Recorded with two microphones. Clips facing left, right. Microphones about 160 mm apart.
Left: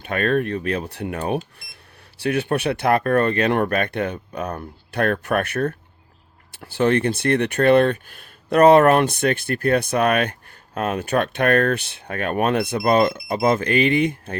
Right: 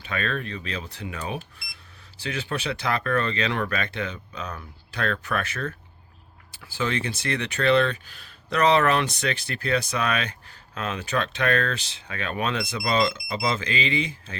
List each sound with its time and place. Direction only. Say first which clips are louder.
0.0 s speech: left 9 dB; 55° left (ahead or behind)